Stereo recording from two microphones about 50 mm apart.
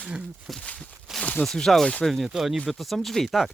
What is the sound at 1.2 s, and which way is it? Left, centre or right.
Zipper, left.